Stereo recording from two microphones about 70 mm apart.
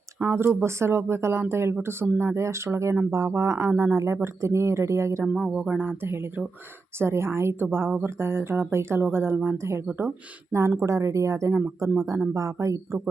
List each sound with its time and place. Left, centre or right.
0.2 s speech: right
5.5 s speech: right